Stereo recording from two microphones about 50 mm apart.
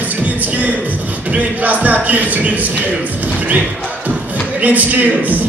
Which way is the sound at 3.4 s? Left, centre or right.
Right.